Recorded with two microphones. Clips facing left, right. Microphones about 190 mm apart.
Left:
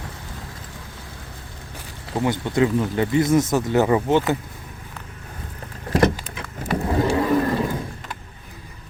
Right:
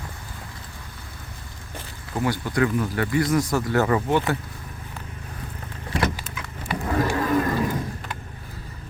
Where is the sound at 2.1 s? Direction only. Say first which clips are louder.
Left 3 dB; 25° left (ahead or behind).